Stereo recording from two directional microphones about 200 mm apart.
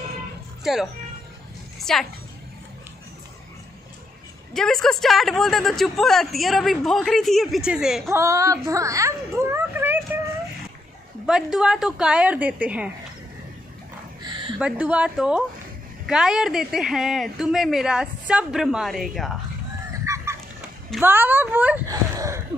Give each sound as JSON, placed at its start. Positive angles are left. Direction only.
{"t": 1.8, "sound": "a woman's voice", "side_deg": 0}
{"t": 4.6, "sound": "speech", "side_deg": 5}
{"t": 8.2, "sound": "speech", "side_deg": -15}
{"t": 11.2, "sound": "speech", "side_deg": -5}
{"t": 14.2, "sound": "a sound", "side_deg": -25}
{"t": 14.6, "sound": "speech", "side_deg": -5}
{"t": 19.9, "sound": "fowl", "side_deg": -15}
{"t": 21.0, "sound": "speech", "side_deg": -10}